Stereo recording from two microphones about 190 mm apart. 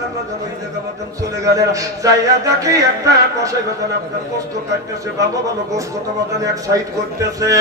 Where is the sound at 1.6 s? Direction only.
15° right (ahead or behind).